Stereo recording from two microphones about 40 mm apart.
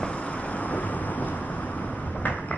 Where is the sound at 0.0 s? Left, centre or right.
Left.